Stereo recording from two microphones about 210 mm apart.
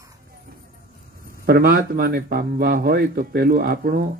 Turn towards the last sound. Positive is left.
turn(degrees=-45)  # may be behind; listen again after turning